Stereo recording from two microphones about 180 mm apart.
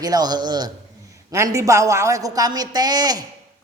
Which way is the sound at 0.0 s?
20° right (ahead or behind).